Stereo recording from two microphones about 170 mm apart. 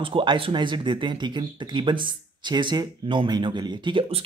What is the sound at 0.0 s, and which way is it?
Speech, 30° right (ahead or behind).